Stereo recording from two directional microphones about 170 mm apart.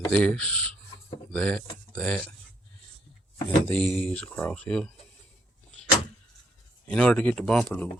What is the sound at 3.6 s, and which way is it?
Speech, 5° left (ahead or behind).